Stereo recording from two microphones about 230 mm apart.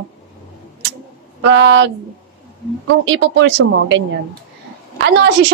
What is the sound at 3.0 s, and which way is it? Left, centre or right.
Speech, right.